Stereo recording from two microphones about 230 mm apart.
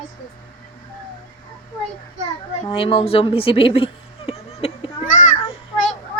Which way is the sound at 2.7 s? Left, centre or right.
Left.